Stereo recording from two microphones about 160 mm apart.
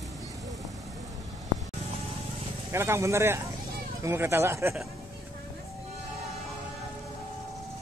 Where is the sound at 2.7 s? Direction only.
15° right (ahead or behind).